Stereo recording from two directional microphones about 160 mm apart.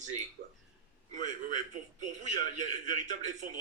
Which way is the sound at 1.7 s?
50° right (ahead or behind).